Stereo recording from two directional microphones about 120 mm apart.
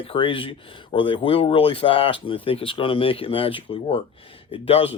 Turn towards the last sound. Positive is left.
turn(degrees=55)  # may be behind; listen again after turning